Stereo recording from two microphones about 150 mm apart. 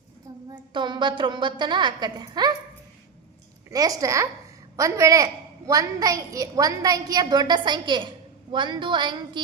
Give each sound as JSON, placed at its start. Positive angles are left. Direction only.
{"t": 0.5, "sound": "a woman's voice", "side_deg": -30}
{"t": 3.7, "sound": "a woman's voice", "side_deg": -25}